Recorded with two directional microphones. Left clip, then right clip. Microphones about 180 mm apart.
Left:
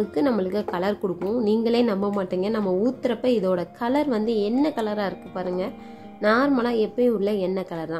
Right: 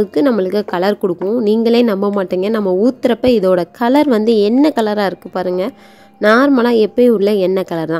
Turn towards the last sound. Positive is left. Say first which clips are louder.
# right 11 dB
turn(degrees=-50)  # may be behind; listen again after turning